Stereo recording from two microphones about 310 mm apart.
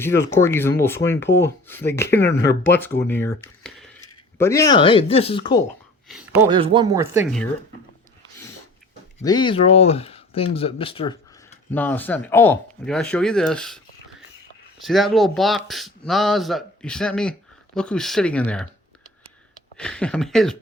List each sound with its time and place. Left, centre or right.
0.0 s speech: centre
6.5 s speech: centre
9.2 s speech: centre
11.7 s speech: centre
14.8 s speech: centre
19.7 s speech: centre